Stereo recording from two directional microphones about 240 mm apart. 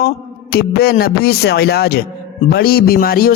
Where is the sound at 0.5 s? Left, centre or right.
Left.